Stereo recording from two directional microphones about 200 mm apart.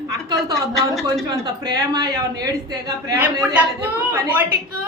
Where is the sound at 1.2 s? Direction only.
20° right (ahead or behind).